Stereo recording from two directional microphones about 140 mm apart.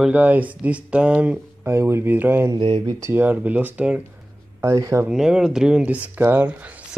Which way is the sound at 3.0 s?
15° right (ahead or behind).